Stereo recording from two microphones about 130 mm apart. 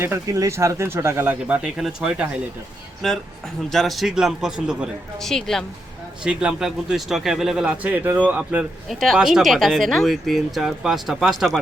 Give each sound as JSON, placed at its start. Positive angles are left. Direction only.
{"t": 0.0, "sound": "speech", "side_deg": -20}
{"t": 3.0, "sound": "speech", "side_deg": 5}
{"t": 6.2, "sound": "speech", "side_deg": -5}
{"t": 8.9, "sound": "speech", "side_deg": 0}